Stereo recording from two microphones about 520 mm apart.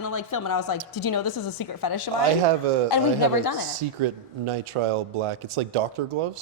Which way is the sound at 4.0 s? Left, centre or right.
Right.